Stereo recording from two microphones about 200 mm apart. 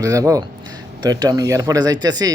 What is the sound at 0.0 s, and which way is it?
Speech, 15° right (ahead or behind).